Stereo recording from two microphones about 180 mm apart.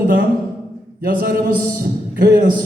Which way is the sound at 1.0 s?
55° right (ahead or behind).